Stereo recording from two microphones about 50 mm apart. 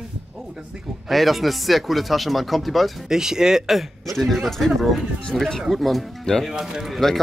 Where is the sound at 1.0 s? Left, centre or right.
Centre.